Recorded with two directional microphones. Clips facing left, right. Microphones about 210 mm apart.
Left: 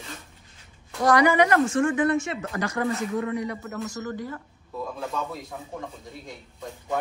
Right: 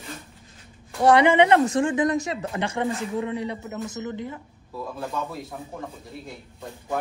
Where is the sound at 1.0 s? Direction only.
25° right (ahead or behind).